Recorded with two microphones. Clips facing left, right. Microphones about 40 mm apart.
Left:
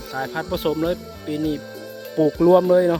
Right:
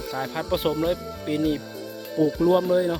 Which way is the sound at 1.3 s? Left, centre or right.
Centre.